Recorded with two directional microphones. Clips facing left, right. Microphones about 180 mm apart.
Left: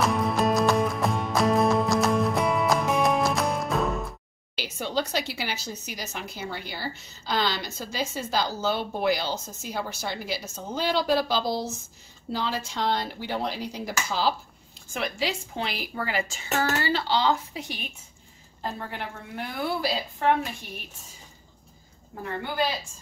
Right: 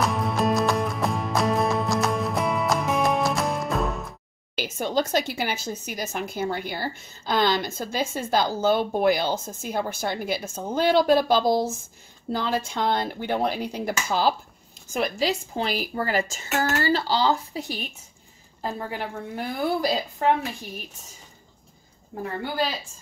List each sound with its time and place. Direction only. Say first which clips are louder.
0.0 s music: even; centre (ahead or behind)
4.6 s a woman's voice: right 4 dB; 50° right (ahead or behind)
14.9 s a woman's voice: right 5 dB; 40° right (ahead or behind)
18.9 s a woman's voice: right 4 dB; 40° right (ahead or behind)